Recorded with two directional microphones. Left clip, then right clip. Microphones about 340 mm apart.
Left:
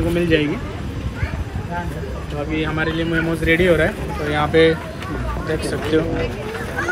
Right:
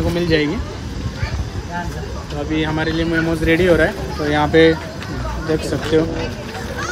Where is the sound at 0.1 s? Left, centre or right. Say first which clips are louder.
Even; right.